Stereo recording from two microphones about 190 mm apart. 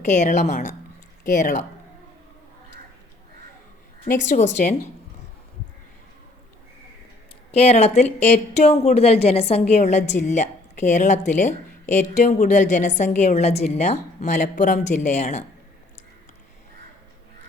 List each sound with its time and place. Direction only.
0.0 s speech: 40° left (ahead or behind)
4.0 s speech: 40° left (ahead or behind)
7.5 s speech: 35° left (ahead or behind)